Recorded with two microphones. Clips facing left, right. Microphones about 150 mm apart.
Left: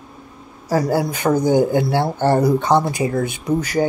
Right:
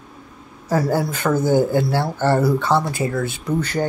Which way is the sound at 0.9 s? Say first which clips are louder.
Left 2 dB; 15° left (ahead or behind).